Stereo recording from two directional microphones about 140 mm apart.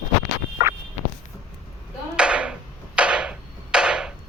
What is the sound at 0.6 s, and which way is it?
Fowl, 20° right (ahead or behind).